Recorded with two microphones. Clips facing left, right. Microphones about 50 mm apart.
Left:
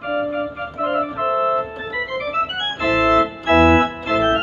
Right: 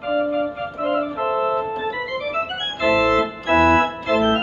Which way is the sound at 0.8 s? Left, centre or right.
Centre.